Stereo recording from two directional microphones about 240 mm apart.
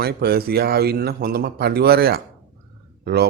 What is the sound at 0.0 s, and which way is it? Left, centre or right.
Speech, right.